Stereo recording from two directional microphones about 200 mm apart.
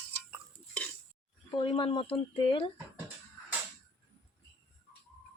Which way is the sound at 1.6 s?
25° left (ahead or behind).